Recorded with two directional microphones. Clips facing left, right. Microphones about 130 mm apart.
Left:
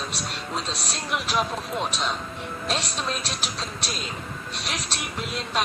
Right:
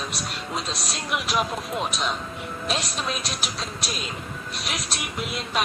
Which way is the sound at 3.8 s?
5° right (ahead or behind).